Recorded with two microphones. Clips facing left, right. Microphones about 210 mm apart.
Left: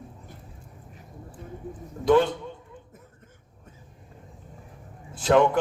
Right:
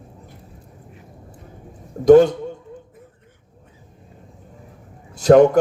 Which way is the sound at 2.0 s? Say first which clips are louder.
Right 10 dB; 45° right (ahead or behind).